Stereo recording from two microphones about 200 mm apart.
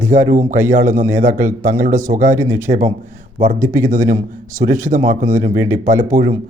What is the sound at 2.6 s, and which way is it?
Speech, 40° right (ahead or behind).